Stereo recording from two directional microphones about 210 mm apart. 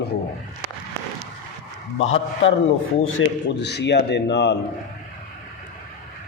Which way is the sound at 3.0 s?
55° left (ahead or behind).